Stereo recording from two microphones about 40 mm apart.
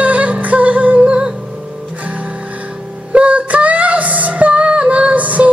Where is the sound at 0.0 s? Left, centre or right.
Right.